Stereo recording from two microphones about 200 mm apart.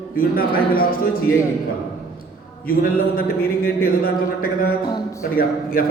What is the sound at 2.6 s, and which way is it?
A man's voice, 45° left (ahead or behind).